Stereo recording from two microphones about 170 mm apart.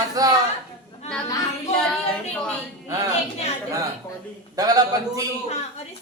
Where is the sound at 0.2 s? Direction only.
20° right (ahead or behind).